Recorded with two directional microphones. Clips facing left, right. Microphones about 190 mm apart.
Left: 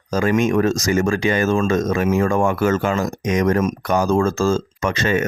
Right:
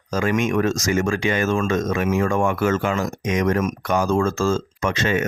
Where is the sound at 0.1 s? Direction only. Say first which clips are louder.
Left 3 dB; 35° left (ahead or behind).